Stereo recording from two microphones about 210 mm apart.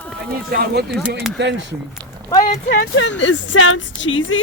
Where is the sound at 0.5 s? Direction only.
50° right (ahead or behind).